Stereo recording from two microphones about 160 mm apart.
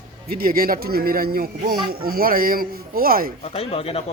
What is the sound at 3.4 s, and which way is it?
Speech, 40° left (ahead or behind).